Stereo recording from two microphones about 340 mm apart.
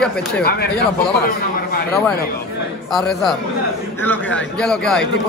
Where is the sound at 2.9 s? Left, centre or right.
Centre.